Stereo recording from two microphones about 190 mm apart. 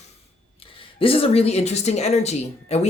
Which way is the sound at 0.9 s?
30° left (ahead or behind).